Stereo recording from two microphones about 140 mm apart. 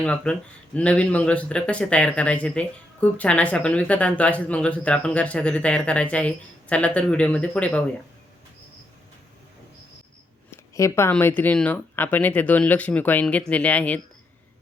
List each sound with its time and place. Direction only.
0.0 s speech: 10° left (ahead or behind)
10.5 s a sound: 20° left (ahead or behind)
11.1 s speech: 15° left (ahead or behind)